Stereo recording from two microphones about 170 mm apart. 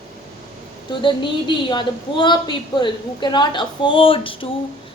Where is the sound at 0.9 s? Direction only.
30° left (ahead or behind).